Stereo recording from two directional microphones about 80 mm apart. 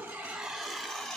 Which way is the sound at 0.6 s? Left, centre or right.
Centre.